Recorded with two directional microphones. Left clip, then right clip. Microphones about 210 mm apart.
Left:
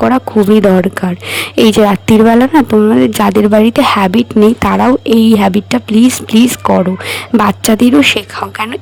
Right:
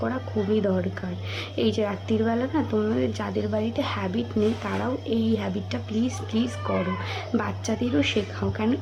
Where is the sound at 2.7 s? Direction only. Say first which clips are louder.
Left 17 dB; 40° left (ahead or behind).